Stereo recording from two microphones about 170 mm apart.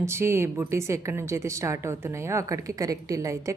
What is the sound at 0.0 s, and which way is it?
A woman's voice, 15° right (ahead or behind).